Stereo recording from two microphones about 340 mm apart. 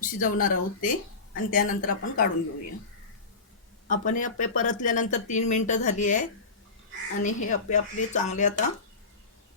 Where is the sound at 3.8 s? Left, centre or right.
Left.